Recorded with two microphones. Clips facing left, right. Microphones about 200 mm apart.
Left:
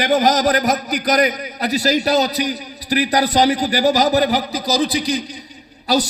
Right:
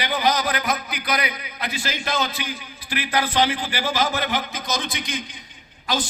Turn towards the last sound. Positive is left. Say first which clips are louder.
# left 8 dB
turn(degrees=40)  # may be behind; listen again after turning